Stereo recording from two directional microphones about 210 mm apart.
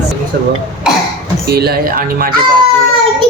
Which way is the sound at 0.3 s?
50° right (ahead or behind).